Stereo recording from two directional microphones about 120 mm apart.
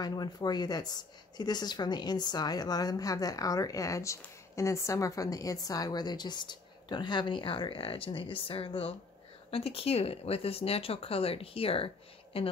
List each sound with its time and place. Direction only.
0.0 s a woman's voice: 35° left (ahead or behind); by 12.5 s 50° left (ahead or behind)